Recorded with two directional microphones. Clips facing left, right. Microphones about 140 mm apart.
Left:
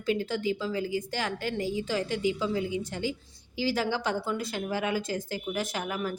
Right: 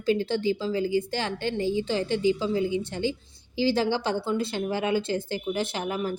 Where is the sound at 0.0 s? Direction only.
30° right (ahead or behind).